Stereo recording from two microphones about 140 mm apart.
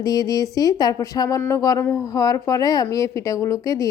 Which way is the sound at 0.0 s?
25° left (ahead or behind).